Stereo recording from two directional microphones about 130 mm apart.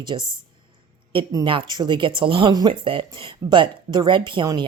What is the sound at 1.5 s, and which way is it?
Speech, 40° right (ahead or behind).